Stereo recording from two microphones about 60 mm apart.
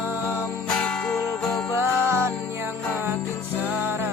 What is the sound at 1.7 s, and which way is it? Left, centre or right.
Music, right.